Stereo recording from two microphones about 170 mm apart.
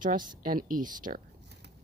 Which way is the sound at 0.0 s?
50° right (ahead or behind).